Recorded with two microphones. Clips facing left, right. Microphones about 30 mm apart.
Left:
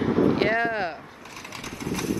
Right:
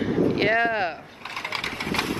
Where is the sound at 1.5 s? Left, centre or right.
Right.